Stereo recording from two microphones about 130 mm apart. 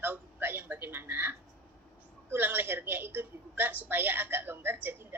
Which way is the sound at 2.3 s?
15° right (ahead or behind).